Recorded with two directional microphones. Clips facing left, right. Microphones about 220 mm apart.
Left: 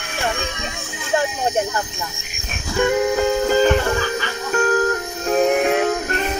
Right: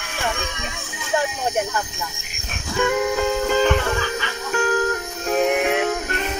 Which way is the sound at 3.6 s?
40° left (ahead or behind).